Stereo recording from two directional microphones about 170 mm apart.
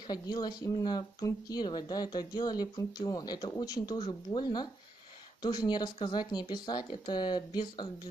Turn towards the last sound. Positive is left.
turn(degrees=25)  # may be behind; listen again after turning